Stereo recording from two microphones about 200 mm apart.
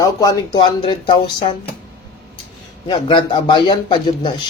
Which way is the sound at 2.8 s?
25° left (ahead or behind).